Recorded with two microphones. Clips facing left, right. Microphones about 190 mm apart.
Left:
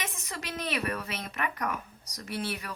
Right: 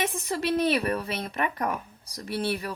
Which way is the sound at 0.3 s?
30° right (ahead or behind).